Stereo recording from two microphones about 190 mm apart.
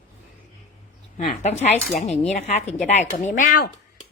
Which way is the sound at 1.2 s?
35° left (ahead or behind).